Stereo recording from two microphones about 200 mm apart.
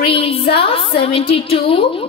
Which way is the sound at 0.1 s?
30° left (ahead or behind).